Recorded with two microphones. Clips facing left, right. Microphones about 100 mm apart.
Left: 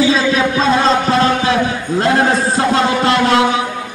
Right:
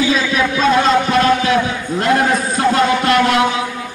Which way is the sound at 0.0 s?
30° left (ahead or behind).